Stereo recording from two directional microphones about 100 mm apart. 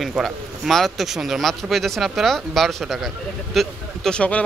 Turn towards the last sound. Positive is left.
turn(degrees=10)  # may be behind; listen again after turning